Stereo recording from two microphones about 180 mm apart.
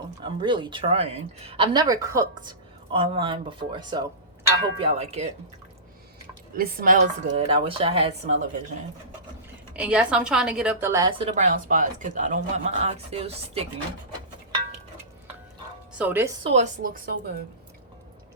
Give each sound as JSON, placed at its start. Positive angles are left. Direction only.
{"t": 0.2, "sound": "speech", "side_deg": -25}
{"t": 6.6, "sound": "speech", "side_deg": -55}
{"t": 9.7, "sound": "a woman's voice", "side_deg": -5}
{"t": 11.2, "sound": "speech", "side_deg": -40}
{"t": 16.0, "sound": "a woman's voice", "side_deg": -10}
{"t": 16.4, "sound": "speech", "side_deg": -35}
{"t": 16.8, "sound": "speech", "side_deg": -50}